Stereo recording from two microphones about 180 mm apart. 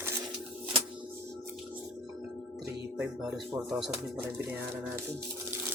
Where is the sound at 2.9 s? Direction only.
5° right (ahead or behind).